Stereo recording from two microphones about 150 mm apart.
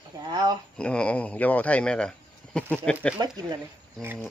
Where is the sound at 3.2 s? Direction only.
25° right (ahead or behind).